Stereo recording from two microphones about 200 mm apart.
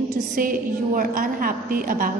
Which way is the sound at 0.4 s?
45° right (ahead or behind).